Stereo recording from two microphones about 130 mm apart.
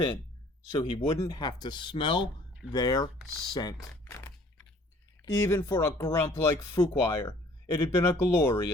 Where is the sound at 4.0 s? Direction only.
20° left (ahead or behind).